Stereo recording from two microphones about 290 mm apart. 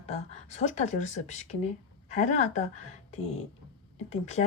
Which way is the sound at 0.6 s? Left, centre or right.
Left.